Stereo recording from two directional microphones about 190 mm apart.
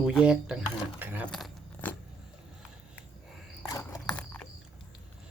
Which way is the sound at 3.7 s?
15° left (ahead or behind).